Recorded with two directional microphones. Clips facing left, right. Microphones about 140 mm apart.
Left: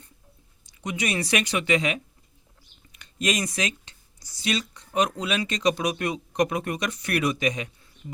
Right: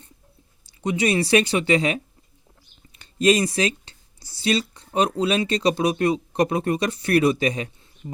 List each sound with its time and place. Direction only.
0.6 s speech: 30° right (ahead or behind)